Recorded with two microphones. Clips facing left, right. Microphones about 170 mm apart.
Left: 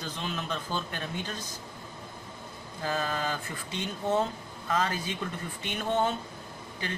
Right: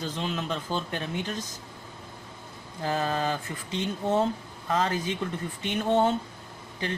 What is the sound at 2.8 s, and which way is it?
Speech, 20° right (ahead or behind).